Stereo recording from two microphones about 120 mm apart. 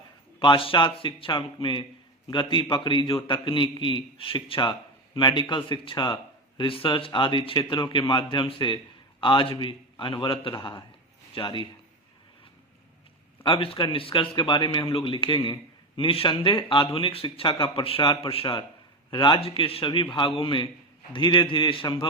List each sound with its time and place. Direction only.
0.3 s a man's voice: 45° left (ahead or behind)
13.4 s a man's voice: 50° left (ahead or behind)